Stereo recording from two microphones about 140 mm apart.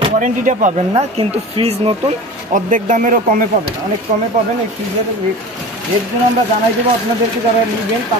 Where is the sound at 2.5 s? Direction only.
70° right (ahead or behind).